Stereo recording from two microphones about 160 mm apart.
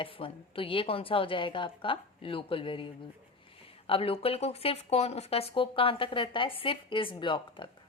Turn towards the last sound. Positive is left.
turn(degrees=30)  # may be behind; listen again after turning